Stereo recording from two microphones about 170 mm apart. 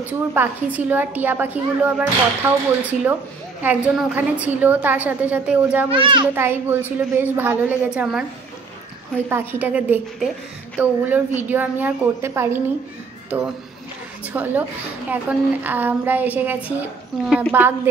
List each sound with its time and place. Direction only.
0.0 s a woman's voice: 10° right (ahead or behind)
5.9 s a child's voice: 30° right (ahead or behind)
6.3 s a woman's voice: 15° right (ahead or behind)
9.3 s a woman's voice: 10° right (ahead or behind)